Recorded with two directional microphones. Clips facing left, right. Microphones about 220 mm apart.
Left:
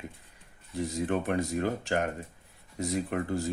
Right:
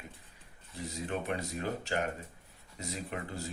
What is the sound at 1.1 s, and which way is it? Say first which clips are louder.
Speech: left 5 dB; 50° left (ahead or behind).